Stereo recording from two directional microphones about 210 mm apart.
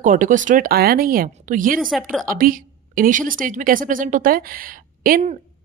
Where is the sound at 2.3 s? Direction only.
40° right (ahead or behind).